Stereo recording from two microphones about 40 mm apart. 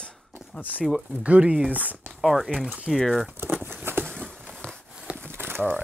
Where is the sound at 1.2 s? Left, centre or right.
Right.